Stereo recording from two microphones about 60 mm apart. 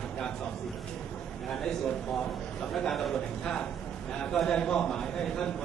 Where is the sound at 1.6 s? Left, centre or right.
Centre.